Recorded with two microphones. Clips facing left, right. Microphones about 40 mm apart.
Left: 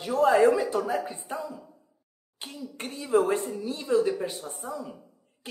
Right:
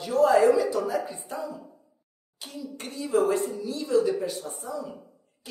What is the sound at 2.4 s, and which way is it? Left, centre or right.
A woman's voice, left.